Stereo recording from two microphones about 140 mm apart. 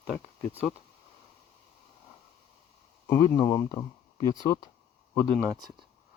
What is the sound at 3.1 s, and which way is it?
Speech, 20° left (ahead or behind).